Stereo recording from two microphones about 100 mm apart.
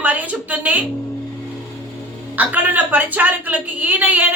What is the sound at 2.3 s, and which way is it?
A woman's voice, 15° right (ahead or behind).